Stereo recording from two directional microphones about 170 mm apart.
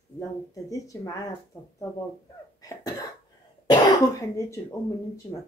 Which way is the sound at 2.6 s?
20° left (ahead or behind).